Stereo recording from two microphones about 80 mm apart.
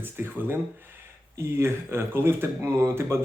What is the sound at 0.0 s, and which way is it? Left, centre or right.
Speech, right.